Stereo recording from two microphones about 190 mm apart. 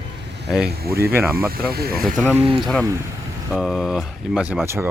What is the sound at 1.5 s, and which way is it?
Speech, 55° right (ahead or behind).